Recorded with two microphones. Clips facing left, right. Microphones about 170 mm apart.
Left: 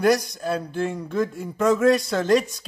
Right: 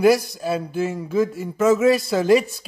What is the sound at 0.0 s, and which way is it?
A man's voice, 5° right (ahead or behind).